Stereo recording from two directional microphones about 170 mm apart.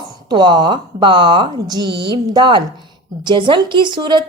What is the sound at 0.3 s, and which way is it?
Speech, 25° right (ahead or behind).